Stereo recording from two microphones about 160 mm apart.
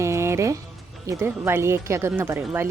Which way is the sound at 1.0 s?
15° right (ahead or behind).